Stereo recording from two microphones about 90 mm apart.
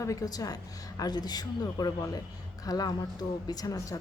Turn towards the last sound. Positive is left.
turn(degrees=40)  # may be behind; listen again after turning